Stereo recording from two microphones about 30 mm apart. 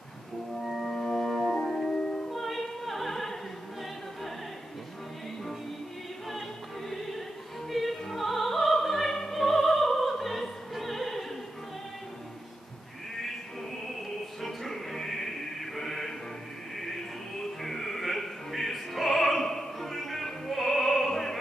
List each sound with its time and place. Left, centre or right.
0.7 s music: centre
0.9 s organ: left
1.5 s music: centre
2.0 s music: left
2.2 s music: centre
6.9 s music: centre
10.7 s opera: centre
14.4 s music: centre
20.2 s opera: centre